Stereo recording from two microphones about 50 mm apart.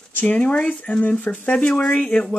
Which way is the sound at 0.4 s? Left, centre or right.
Left.